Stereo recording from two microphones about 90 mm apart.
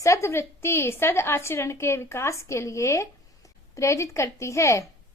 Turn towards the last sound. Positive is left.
turn(degrees=35)  # may be behind; listen again after turning